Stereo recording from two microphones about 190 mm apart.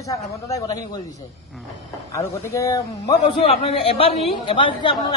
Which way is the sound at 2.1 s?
15° left (ahead or behind).